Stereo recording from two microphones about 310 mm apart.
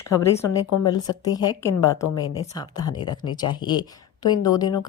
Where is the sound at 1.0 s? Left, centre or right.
Centre.